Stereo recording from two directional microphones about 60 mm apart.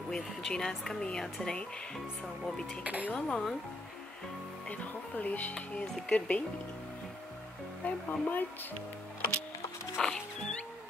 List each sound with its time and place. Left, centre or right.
0.1 s speech: centre
2.8 s a woman's voice: right
3.1 s speech: centre
4.6 s speech: left
5.5 s speech: centre
7.8 s speech: left
9.9 s music: centre